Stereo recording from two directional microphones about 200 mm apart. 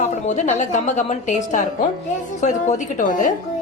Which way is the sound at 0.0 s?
35° left (ahead or behind).